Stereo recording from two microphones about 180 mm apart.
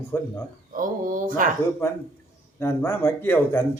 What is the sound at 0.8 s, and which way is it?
Speech, 45° right (ahead or behind).